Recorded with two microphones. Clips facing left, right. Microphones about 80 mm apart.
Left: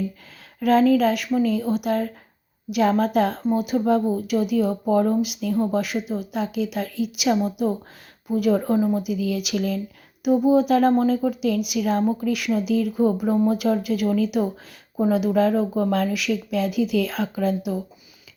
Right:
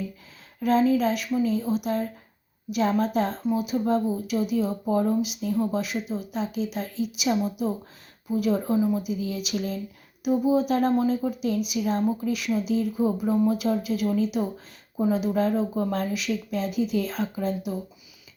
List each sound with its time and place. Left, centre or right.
0.6 s speech: left
10.2 s speech: left